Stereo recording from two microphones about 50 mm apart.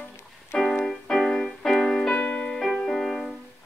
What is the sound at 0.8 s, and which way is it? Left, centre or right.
Music, centre.